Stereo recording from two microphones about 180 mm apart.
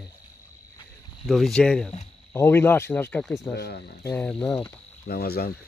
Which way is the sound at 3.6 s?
65° left (ahead or behind).